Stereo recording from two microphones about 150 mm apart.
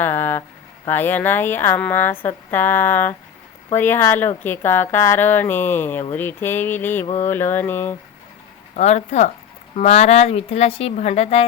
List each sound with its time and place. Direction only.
0.0 s a sound: 15° left (ahead or behind)
0.9 s speech: 15° left (ahead or behind)
8.7 s speech: 50° left (ahead or behind)